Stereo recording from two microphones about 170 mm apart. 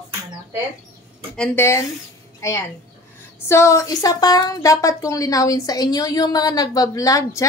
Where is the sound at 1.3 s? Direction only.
10° left (ahead or behind).